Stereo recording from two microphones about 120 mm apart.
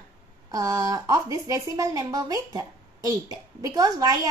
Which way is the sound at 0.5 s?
30° right (ahead or behind).